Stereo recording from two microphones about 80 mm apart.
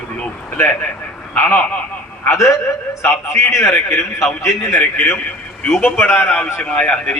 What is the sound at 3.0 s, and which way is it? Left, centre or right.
A man's voice, left.